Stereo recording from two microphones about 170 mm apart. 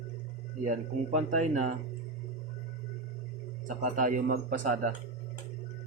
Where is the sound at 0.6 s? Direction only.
45° right (ahead or behind).